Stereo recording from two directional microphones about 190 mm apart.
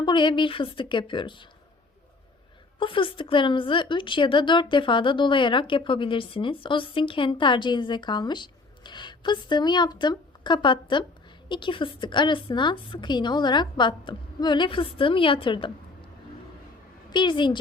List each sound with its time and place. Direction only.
0.0 s a woman's voice: 25° left (ahead or behind)
2.7 s a woman's voice: 25° left (ahead or behind)
17.1 s a woman's voice: 25° left (ahead or behind)